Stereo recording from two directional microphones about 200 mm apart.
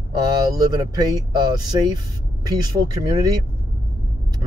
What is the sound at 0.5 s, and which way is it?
Speech, 20° right (ahead or behind).